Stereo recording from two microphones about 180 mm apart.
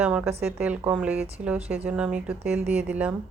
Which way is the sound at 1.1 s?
35° right (ahead or behind).